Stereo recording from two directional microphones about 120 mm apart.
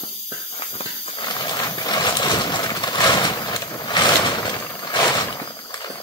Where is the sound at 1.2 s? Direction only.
35° left (ahead or behind).